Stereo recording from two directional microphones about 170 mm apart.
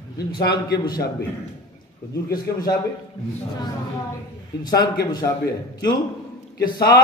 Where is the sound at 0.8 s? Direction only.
25° left (ahead or behind).